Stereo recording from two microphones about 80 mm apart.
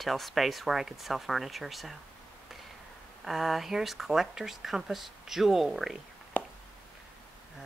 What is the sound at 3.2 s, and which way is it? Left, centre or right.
Speech, centre.